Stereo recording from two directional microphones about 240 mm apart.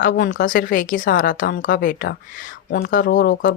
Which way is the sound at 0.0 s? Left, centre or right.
Left.